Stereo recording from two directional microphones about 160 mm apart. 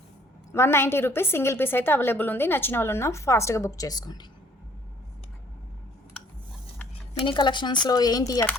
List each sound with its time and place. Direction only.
0.5 s a woman's voice: 15° left (ahead or behind)
7.3 s speech: 30° left (ahead or behind)